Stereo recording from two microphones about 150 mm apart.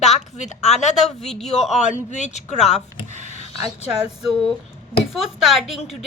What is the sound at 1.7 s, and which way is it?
Speech, 50° left (ahead or behind).